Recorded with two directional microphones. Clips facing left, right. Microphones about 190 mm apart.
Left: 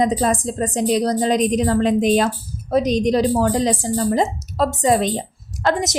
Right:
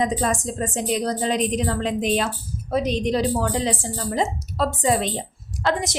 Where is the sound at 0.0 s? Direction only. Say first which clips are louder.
Left 4 dB; 35° left (ahead or behind).